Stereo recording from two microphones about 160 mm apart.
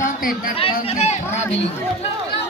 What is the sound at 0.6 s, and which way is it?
Speech, 35° left (ahead or behind).